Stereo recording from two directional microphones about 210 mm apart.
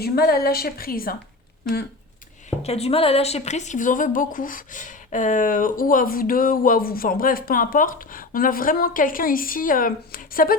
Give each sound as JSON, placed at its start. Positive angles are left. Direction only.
{"t": 0.0, "sound": "a woman's voice", "side_deg": 45}
{"t": 2.6, "sound": "a woman's voice", "side_deg": 30}